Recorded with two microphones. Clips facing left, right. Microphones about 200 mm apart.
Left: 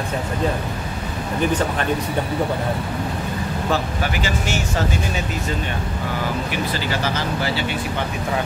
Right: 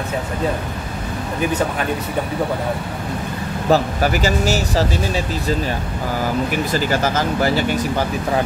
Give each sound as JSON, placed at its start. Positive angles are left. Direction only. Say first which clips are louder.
{"t": 3.7, "sound": "speech", "louder": "right 8 dB", "side_deg": -40}
{"t": 6.5, "sound": "speech", "louder": "right 5 dB", "side_deg": -45}